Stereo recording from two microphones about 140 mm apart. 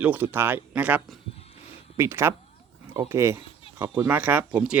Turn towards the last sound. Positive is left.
turn(degrees=-10)  # may be behind; listen again after turning